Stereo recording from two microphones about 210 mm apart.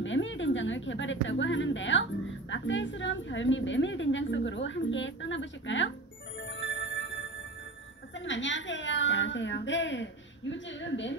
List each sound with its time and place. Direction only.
0.0 s a woman's voice: 65° left (ahead or behind)
6.6 s music: 60° left (ahead or behind)
8.3 s a woman's voice: 60° left (ahead or behind)